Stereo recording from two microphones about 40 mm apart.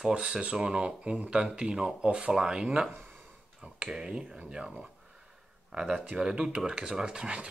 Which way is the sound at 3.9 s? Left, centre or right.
Centre.